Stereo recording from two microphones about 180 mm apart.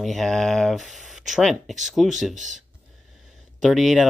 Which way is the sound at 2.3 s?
45° right (ahead or behind).